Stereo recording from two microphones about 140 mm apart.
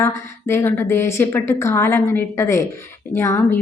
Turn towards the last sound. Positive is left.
turn(degrees=20)  # may be behind; listen again after turning